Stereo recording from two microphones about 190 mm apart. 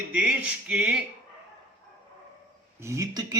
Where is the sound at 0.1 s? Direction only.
5° right (ahead or behind).